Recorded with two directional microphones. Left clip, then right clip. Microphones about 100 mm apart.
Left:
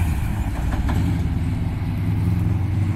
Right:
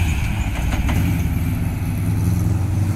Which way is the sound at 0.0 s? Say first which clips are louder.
Right 4 dB; 15° right (ahead or behind).